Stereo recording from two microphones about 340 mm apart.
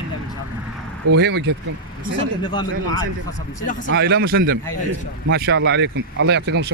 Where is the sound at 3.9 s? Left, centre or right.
Right.